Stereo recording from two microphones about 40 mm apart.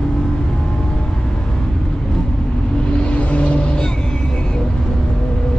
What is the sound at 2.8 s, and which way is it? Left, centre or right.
Vehicle, left.